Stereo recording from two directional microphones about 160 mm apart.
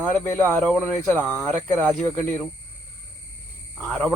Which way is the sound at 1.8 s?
5° left (ahead or behind).